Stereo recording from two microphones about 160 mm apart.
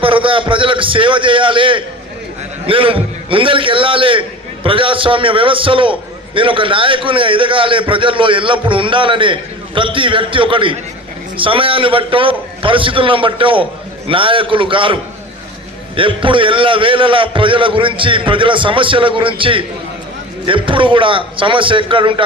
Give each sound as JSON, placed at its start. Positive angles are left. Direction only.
{"t": 0.0, "sound": "a man's voice", "side_deg": -35}
{"t": 16.0, "sound": "a man's voice", "side_deg": -30}